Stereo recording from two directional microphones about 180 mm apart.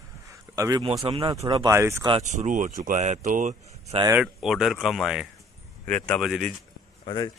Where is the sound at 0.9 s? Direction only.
25° right (ahead or behind).